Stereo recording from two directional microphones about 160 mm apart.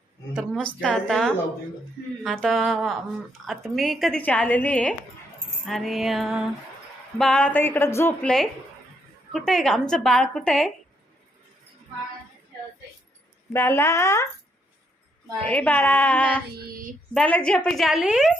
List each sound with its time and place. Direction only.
0.6 s a woman's voice: 5° left (ahead or behind)
13.5 s a woman's voice: 15° left (ahead or behind)
15.4 s a woman's voice: 10° left (ahead or behind)
16.6 s female singing: 65° right (ahead or behind)
17.2 s speech: 5° left (ahead or behind)